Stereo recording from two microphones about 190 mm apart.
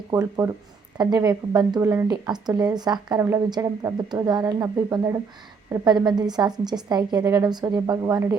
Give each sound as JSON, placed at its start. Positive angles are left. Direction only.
{"t": 0.1, "sound": "speech", "side_deg": -15}